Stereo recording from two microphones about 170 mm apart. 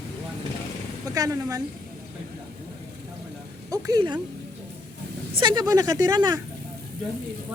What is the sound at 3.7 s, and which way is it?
Speech, 20° right (ahead or behind).